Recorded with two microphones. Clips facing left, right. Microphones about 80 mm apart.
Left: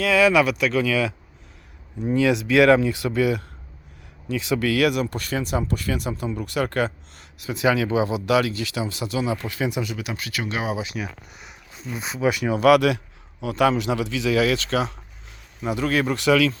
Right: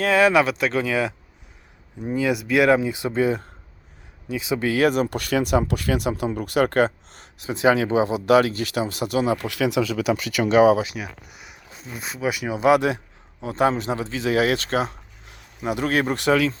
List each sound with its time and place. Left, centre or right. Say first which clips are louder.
0.0 s speech: even; right
2.0 s speech: left 3 dB; centre
4.3 s speech: left 1 dB; centre; by 5.0 s right
5.0 s speech: right 4 dB; right
9.5 s speech: right 4 dB; right
10.8 s speech: left 2 dB; centre
12.5 s speech: left 1 dB; right
16.3 s speech: left 1 dB; right